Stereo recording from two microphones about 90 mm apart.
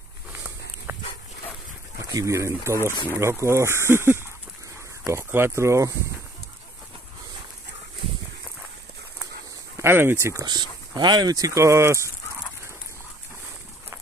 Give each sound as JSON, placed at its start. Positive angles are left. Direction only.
{"t": 0.9, "sound": "dog", "side_deg": -30}
{"t": 2.1, "sound": "speech", "side_deg": -35}
{"t": 9.8, "sound": "speech", "side_deg": -25}
{"t": 10.4, "sound": "speech", "side_deg": -55}